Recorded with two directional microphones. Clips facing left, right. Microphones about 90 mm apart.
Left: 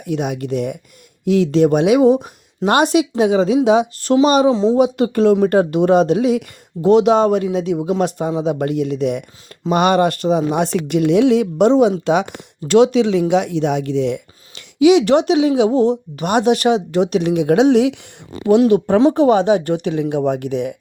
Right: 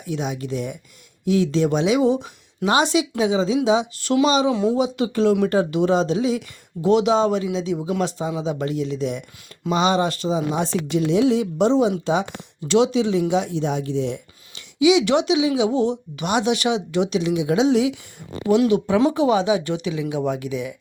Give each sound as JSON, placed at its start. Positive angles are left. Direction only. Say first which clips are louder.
{"t": 0.0, "sound": "speech", "louder": "left 5 dB", "side_deg": 60}
{"t": 4.5, "sound": "speech", "louder": "left 5 dB", "side_deg": 25}
{"t": 4.8, "sound": "speech", "louder": "left 6 dB", "side_deg": 50}
{"t": 12.6, "sound": "speech", "louder": "left 6 dB", "side_deg": 55}
{"t": 19.1, "sound": "speech", "louder": "left 5 dB", "side_deg": 55}